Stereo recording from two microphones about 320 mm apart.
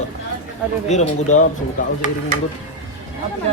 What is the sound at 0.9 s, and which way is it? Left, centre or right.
Speech, left.